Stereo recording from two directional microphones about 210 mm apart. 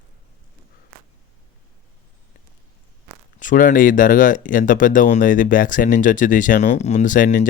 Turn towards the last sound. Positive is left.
turn(degrees=40)  # may be behind; listen again after turning